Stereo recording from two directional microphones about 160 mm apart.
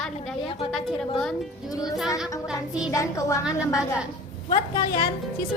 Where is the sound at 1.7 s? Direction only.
25° left (ahead or behind).